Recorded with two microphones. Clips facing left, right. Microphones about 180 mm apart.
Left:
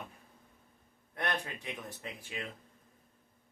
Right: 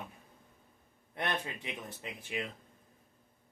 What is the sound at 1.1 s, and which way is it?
Speech, 20° right (ahead or behind).